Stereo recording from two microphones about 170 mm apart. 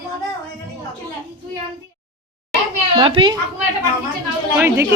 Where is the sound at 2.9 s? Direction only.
30° right (ahead or behind).